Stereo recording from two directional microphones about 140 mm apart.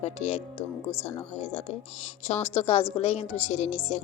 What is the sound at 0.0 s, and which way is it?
A woman's voice, 50° left (ahead or behind).